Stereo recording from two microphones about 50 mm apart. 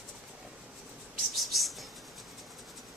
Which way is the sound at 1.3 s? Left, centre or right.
Centre.